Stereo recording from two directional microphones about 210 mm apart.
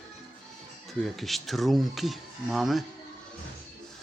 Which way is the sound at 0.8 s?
Centre (ahead or behind).